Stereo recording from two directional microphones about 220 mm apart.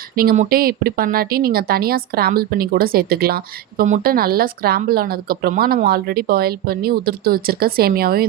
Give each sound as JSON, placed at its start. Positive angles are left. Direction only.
{"t": 0.2, "sound": "speech", "side_deg": -40}